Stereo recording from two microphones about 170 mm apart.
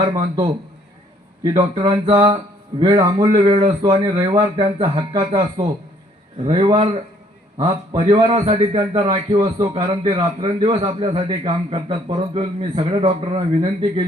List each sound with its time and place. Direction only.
0.0 s speech: 25° right (ahead or behind)
1.5 s a man's voice: 25° right (ahead or behind)